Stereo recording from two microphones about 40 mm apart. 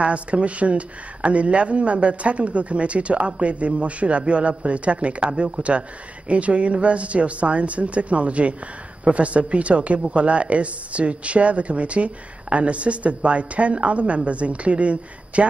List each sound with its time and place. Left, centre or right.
0.0 s speech: right